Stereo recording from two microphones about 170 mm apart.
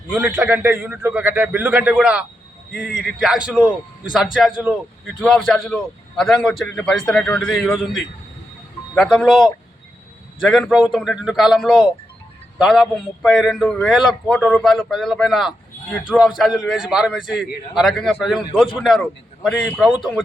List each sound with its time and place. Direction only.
0.1 s a man's voice: 10° right (ahead or behind)
2.8 s a man's voice: 90° left
3.2 s a man's voice: 5° right (ahead or behind)
5.2 s a man's voice: 5° left (ahead or behind)